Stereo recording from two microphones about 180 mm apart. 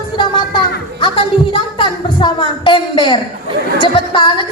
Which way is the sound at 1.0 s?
25° left (ahead or behind).